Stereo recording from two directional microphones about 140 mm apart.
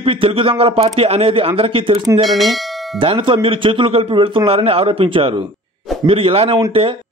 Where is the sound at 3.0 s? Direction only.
40° right (ahead or behind).